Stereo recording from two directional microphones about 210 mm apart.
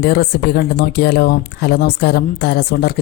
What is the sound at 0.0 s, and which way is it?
Speech, 50° left (ahead or behind).